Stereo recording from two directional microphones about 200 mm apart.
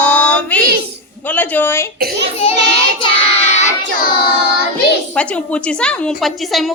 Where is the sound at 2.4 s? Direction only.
30° left (ahead or behind).